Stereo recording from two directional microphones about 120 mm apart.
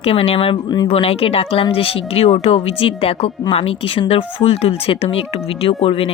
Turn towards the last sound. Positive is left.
turn(degrees=50)  # may be behind; listen again after turning